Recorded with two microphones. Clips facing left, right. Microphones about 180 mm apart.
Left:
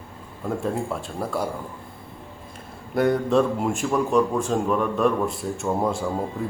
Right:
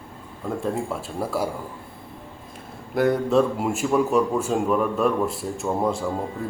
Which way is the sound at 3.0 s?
Centre (ahead or behind).